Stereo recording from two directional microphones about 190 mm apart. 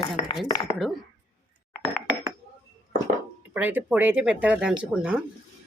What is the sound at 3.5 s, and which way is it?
Speech, 10° right (ahead or behind).